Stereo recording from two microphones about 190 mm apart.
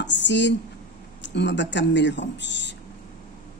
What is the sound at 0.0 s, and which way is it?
A woman's voice, 70° left (ahead or behind).